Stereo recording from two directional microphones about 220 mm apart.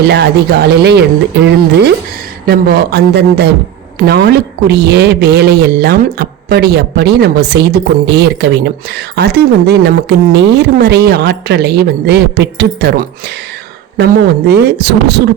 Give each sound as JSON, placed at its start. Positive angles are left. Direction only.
{"t": 0.1, "sound": "speech", "side_deg": -45}
{"t": 2.5, "sound": "speech", "side_deg": -45}